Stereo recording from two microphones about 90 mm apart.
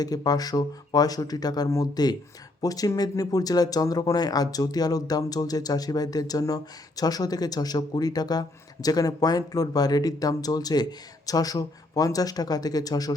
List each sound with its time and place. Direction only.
0.0 s speech: 45° left (ahead or behind)